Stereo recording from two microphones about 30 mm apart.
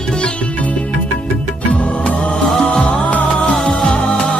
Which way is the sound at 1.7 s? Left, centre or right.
Left.